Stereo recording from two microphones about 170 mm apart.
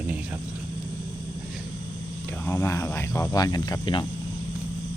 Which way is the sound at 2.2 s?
10° left (ahead or behind).